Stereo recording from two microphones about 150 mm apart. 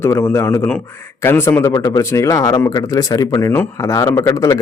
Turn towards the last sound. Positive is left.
turn(degrees=20)  # may be behind; listen again after turning